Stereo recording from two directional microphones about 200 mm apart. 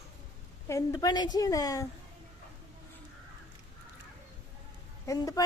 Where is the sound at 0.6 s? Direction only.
15° left (ahead or behind).